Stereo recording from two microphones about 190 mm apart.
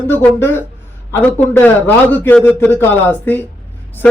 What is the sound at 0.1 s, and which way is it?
Speech, 10° left (ahead or behind).